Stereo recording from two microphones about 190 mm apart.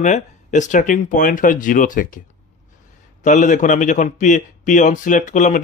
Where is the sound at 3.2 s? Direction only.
40° left (ahead or behind).